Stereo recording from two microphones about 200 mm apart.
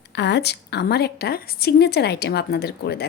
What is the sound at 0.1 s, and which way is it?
A woman's voice, 60° left (ahead or behind).